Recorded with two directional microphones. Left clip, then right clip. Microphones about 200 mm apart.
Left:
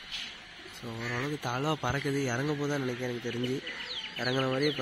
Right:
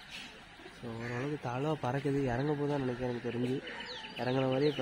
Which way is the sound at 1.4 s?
20° left (ahead or behind).